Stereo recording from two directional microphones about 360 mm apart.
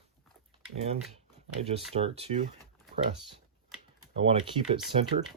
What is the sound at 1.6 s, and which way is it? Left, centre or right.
Speech, centre.